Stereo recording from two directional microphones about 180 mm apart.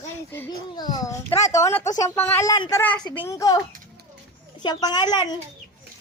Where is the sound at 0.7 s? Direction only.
25° left (ahead or behind).